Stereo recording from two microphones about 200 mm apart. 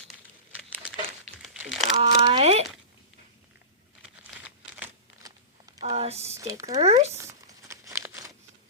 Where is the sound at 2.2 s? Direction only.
30° right (ahead or behind).